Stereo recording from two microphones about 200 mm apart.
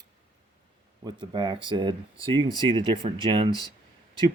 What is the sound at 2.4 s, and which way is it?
Speech, 20° left (ahead or behind).